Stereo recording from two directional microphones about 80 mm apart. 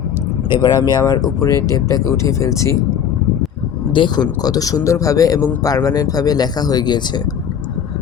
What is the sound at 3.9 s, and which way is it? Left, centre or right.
Speech, left.